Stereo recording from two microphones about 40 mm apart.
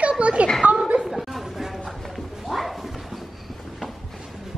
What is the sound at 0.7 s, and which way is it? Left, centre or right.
Chuckle, right.